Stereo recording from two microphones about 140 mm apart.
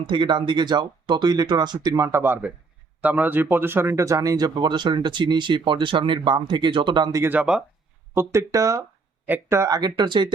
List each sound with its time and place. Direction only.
0.1 s speech: 35° right (ahead or behind)
7.2 s speech: 10° right (ahead or behind)
8.1 s speech: 20° right (ahead or behind)